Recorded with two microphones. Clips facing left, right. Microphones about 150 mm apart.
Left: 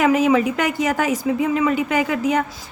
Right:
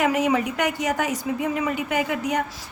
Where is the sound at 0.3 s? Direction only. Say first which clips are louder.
Left 5 dB; 90° left.